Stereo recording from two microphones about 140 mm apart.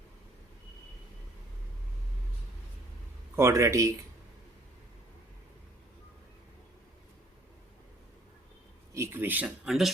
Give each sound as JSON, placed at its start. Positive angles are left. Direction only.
{"t": 3.3, "sound": "speech", "side_deg": -20}
{"t": 8.9, "sound": "a sound", "side_deg": -20}
{"t": 9.6, "sound": "speech", "side_deg": 0}